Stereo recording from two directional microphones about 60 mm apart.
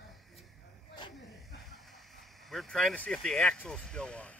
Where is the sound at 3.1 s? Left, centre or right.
Centre.